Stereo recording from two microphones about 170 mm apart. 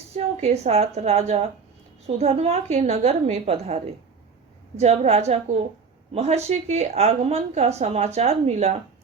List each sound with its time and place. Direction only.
0.2 s a woman's voice: 40° right (ahead or behind)
4.8 s a woman's voice: 40° right (ahead or behind)